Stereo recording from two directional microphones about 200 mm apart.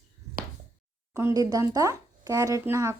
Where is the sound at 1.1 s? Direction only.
15° right (ahead or behind).